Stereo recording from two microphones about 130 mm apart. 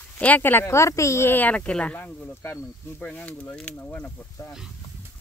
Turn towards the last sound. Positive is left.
turn(degrees=15)  # may be behind; listen again after turning